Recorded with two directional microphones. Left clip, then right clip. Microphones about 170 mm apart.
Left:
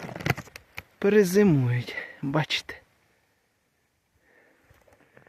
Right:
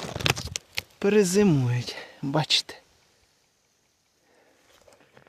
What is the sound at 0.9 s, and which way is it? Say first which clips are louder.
Speech: left 1 dB; centre (ahead or behind).